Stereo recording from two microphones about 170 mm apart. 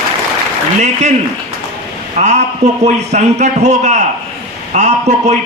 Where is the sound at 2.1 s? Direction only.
45° right (ahead or behind).